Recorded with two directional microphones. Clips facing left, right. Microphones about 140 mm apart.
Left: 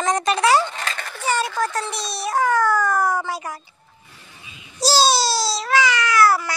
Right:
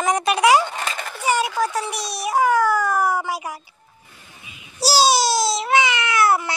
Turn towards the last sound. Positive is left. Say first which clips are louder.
# left 1 dB
turn(degrees=-25)  # may be behind; listen again after turning